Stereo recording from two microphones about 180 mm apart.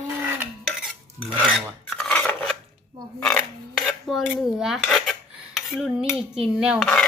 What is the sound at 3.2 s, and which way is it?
Speech, 10° left (ahead or behind).